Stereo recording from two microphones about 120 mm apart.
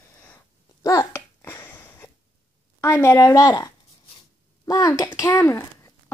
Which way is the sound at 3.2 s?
30° left (ahead or behind).